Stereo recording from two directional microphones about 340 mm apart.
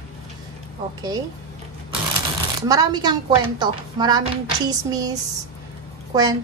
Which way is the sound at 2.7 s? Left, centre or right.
Centre.